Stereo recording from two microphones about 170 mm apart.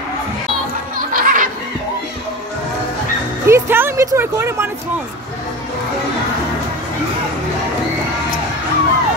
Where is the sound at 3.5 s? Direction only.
15° right (ahead or behind).